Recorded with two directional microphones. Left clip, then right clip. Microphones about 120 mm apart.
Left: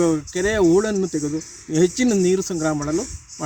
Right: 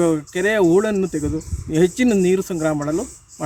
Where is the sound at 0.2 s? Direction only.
10° right (ahead or behind).